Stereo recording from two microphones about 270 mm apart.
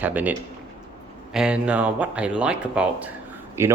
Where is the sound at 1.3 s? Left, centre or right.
Centre.